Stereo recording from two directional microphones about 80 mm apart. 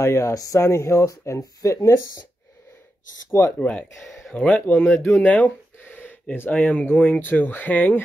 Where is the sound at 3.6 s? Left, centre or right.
Centre.